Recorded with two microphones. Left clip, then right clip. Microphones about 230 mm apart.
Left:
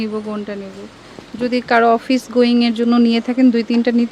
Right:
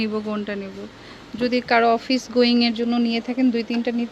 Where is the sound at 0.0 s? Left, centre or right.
Centre.